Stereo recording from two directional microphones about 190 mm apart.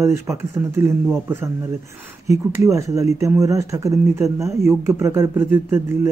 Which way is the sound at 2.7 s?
15° right (ahead or behind).